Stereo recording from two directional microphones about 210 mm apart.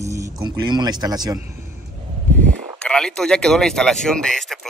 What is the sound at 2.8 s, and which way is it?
Speech, 5° left (ahead or behind).